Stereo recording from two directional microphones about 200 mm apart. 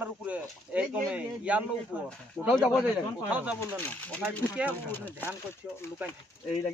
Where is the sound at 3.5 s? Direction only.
10° left (ahead or behind).